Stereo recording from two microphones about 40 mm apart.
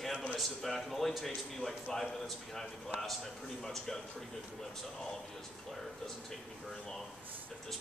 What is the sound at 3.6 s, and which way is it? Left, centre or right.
Speech, centre.